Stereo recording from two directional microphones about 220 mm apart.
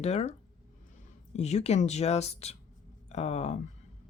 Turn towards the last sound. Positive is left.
turn(degrees=30)  # may be behind; listen again after turning